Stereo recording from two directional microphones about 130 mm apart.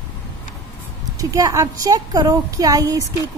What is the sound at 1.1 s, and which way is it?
Speech, 25° right (ahead or behind).